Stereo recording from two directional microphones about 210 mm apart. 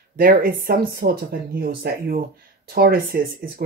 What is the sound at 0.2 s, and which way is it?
Speech, 45° right (ahead or behind).